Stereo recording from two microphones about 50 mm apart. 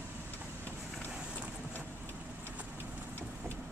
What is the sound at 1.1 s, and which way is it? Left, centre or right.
Boat, centre.